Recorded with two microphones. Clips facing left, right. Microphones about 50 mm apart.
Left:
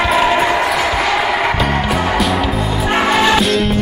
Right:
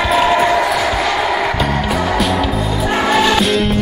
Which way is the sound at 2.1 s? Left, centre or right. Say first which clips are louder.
Even; centre.